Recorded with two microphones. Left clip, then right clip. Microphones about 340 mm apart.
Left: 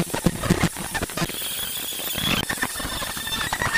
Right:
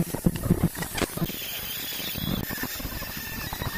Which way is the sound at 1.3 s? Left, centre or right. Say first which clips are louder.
Left 4 dB; centre.